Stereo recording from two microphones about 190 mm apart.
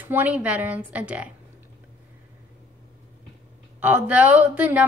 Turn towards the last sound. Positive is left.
turn(degrees=-10)  # may be behind; listen again after turning